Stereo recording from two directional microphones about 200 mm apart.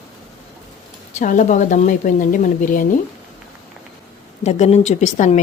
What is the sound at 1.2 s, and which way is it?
Speech, 40° left (ahead or behind).